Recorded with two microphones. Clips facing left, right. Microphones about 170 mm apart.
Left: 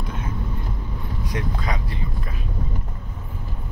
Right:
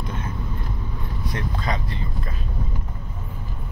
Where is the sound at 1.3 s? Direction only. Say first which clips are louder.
Even; 10° left (ahead or behind).